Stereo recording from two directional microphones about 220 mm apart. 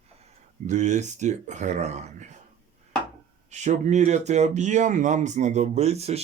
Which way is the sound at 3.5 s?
30° right (ahead or behind).